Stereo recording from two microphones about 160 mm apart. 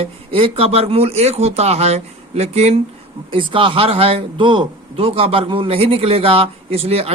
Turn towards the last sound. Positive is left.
turn(degrees=-40)  # may be behind; listen again after turning